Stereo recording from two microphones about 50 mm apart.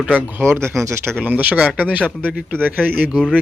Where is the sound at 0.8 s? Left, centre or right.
Right.